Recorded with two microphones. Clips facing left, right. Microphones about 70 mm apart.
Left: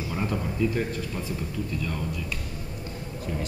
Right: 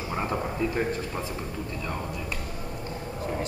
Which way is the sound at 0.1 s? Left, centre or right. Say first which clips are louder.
Right 2 dB; right.